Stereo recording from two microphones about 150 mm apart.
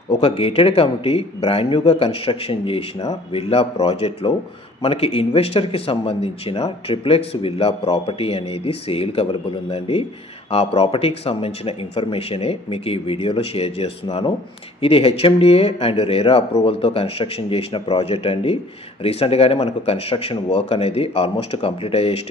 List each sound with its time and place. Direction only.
0.1 s speech: 40° left (ahead or behind)
14.0 s speech: 30° left (ahead or behind)
14.8 s speech: 40° left (ahead or behind)